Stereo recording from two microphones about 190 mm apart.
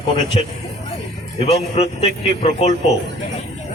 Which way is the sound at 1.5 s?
30° left (ahead or behind).